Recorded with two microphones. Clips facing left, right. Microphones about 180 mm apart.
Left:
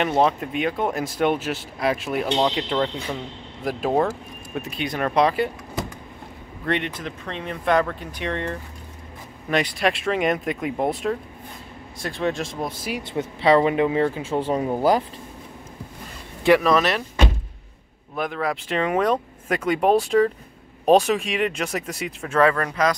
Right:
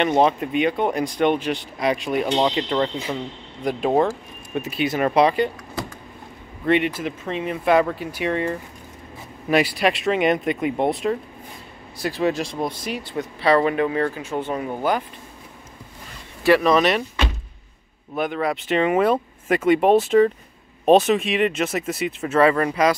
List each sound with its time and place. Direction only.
0.0 s speech: centre (ahead or behind)
6.6 s speech: 5° right (ahead or behind)
13.1 s speech: 20° left (ahead or behind)
14.1 s speech: 30° left (ahead or behind)
16.6 s speech: centre (ahead or behind)
18.1 s speech: centre (ahead or behind)